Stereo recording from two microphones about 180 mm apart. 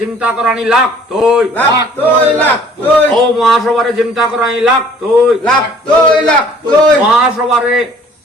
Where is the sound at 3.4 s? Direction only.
Centre (ahead or behind).